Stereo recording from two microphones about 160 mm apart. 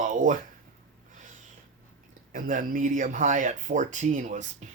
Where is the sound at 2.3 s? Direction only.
55° right (ahead or behind).